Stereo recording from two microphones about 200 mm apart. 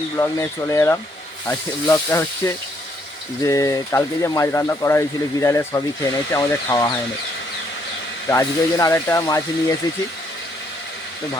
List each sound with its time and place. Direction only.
0.2 s speech: 15° left (ahead or behind)
8.3 s speech: 15° left (ahead or behind)